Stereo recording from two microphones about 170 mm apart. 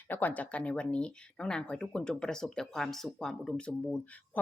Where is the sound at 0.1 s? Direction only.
10° left (ahead or behind).